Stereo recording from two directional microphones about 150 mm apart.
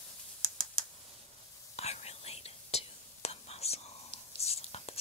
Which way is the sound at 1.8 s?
45° left (ahead or behind).